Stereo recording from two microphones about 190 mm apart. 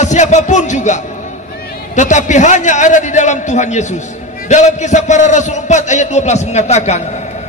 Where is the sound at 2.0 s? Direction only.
40° left (ahead or behind).